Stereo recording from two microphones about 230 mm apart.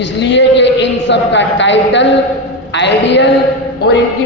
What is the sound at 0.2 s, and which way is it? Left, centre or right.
Speech, left.